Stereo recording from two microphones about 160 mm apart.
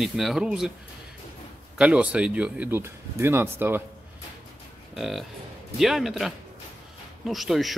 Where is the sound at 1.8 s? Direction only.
5° right (ahead or behind).